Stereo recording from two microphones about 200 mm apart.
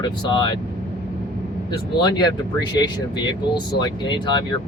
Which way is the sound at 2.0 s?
20° left (ahead or behind).